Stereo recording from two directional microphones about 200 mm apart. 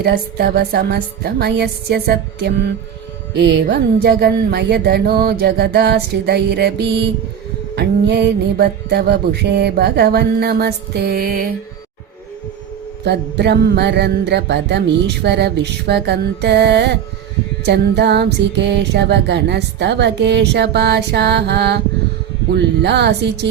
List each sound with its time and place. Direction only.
0.0 s music: 55° right (ahead or behind)
7.8 s mantra: 60° right (ahead or behind)
13.1 s music: 55° right (ahead or behind)